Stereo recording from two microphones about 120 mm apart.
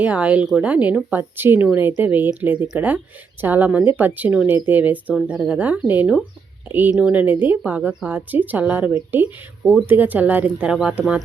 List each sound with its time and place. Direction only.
0.0 s a woman's voice: 10° right (ahead or behind)